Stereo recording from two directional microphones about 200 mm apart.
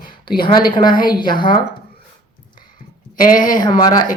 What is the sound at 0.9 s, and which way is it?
Speech, 45° left (ahead or behind).